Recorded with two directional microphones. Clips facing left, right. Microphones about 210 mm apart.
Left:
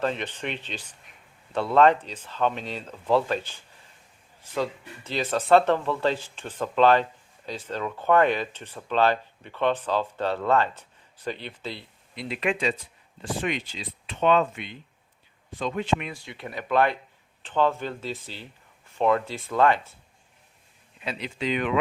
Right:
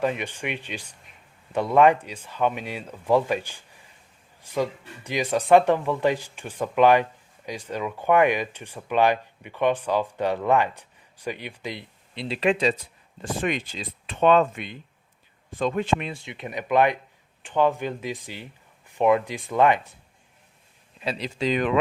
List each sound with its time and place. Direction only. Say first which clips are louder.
0.0 s speech: right 2 dB; 10° right (ahead or behind)
12.1 s speech: right 4 dB; 30° right (ahead or behind)
13.4 s speech: right 4 dB; 50° right (ahead or behind)
16.0 s speech: right 3 dB; 25° right (ahead or behind)
21.0 s speech: right 4 dB; 35° right (ahead or behind)